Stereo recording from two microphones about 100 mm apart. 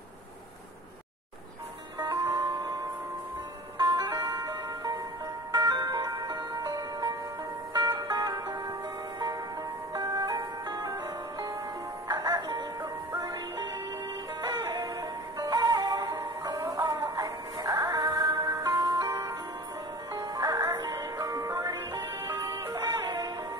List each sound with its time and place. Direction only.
2.3 s music: 40° right (ahead or behind)
9.9 s music: 40° right (ahead or behind)